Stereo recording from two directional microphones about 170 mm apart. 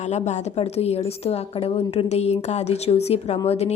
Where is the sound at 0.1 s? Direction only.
40° left (ahead or behind).